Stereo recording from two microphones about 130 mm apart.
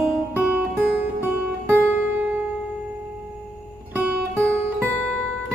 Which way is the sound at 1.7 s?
15° right (ahead or behind).